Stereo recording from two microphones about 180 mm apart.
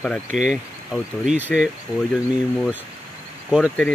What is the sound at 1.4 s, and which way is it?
Speech, 10° right (ahead or behind).